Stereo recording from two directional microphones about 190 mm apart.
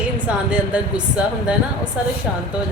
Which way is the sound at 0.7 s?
5° right (ahead or behind).